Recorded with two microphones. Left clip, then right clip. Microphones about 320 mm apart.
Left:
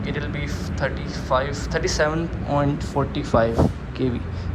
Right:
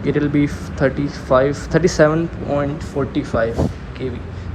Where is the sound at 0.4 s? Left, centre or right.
Centre.